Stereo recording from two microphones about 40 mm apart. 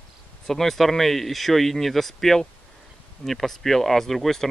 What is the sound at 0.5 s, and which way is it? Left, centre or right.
Speech, centre.